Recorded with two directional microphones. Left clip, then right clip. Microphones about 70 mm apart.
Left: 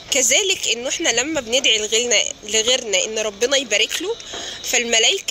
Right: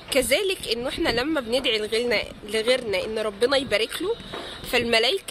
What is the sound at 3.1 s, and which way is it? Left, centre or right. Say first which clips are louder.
Speech: left 3 dB; right.